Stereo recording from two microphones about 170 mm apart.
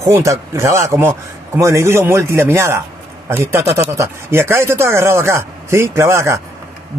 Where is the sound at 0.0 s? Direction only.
20° right (ahead or behind).